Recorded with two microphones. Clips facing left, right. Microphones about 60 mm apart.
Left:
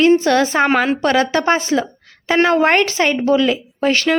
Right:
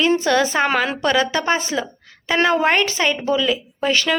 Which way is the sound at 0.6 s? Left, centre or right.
Left.